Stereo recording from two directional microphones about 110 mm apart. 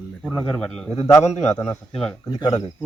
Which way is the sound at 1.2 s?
90° left.